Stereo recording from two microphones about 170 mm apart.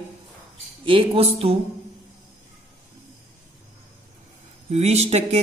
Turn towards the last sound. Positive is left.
turn(degrees=-40)  # may be behind; listen again after turning